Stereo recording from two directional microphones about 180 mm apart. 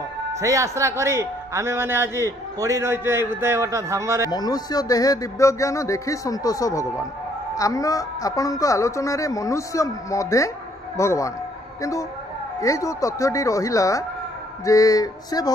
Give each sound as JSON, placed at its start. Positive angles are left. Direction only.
{"t": 0.3, "sound": "a man's voice", "side_deg": -15}
{"t": 4.3, "sound": "speech", "side_deg": 20}
{"t": 12.5, "sound": "speech", "side_deg": 15}